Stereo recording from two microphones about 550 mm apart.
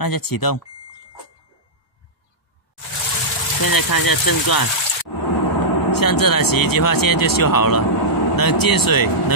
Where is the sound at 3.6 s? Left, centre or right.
Left.